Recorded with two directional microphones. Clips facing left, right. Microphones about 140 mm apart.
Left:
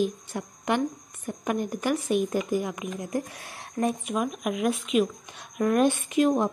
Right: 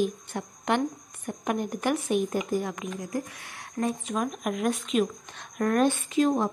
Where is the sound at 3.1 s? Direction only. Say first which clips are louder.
Left 2 dB; 25° left (ahead or behind).